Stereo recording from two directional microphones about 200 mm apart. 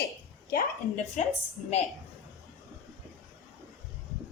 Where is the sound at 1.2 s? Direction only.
35° left (ahead or behind).